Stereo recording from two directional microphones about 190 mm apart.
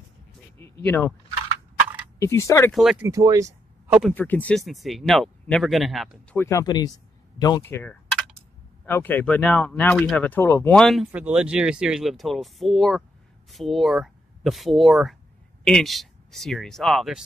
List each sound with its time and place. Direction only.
0.6 s speech: 10° left (ahead or behind)
2.1 s speech: 15° left (ahead or behind)
2.7 s speech: centre (ahead or behind)
3.1 s speech: 20° right (ahead or behind)
4.1 s speech: 10° left (ahead or behind)
6.3 s speech: 15° left (ahead or behind)